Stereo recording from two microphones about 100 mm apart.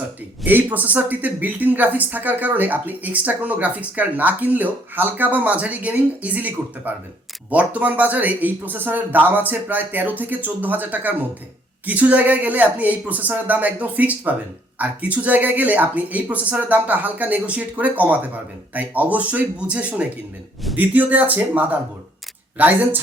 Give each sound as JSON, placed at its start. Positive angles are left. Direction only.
{"t": 0.4, "sound": "speech", "side_deg": -20}